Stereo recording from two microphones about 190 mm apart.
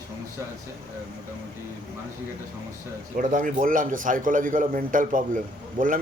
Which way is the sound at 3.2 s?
45° right (ahead or behind).